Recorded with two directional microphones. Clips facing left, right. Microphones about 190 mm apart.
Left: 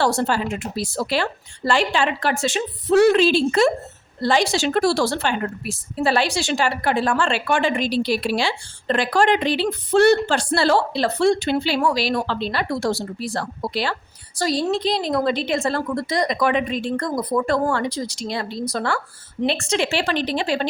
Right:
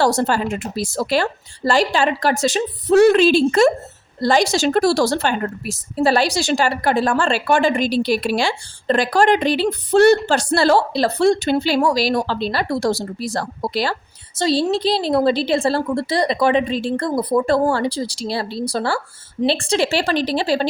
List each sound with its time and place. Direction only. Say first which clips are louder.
0.0 s a woman's voice: right 3 dB; 40° right (ahead or behind)
14.3 s a woman's voice: right 3 dB; 30° right (ahead or behind)